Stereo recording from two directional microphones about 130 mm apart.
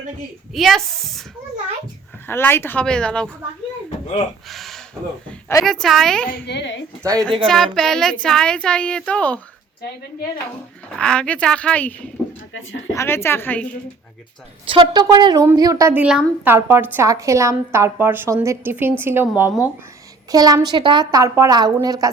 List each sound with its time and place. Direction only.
0.5 s a woman's voice: centre (ahead or behind)
2.2 s a woman's voice: 15° left (ahead or behind)
4.4 s speech: centre (ahead or behind)
5.8 s a woman's voice: centre (ahead or behind)
7.0 s a woman's voice: 25° right (ahead or behind)
7.4 s a woman's voice: 5° left (ahead or behind)
10.9 s a woman's voice: 5° left (ahead or behind)
14.7 s a woman's voice: 40° right (ahead or behind)
16.0 s a woman's voice: 10° right (ahead or behind)
20.3 s a woman's voice: 30° right (ahead or behind)